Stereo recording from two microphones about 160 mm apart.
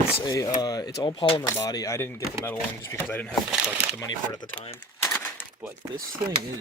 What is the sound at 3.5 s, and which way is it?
Speech, 5° right (ahead or behind).